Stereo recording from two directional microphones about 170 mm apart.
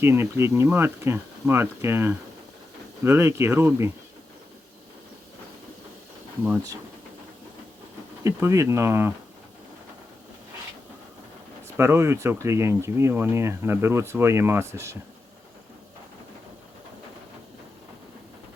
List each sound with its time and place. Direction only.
0.0 s speech: 15° right (ahead or behind)
6.4 s speech: 10° right (ahead or behind)
8.2 s speech: 15° right (ahead or behind)
11.8 s speech: 15° right (ahead or behind)